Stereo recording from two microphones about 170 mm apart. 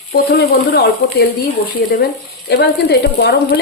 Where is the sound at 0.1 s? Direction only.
65° left (ahead or behind).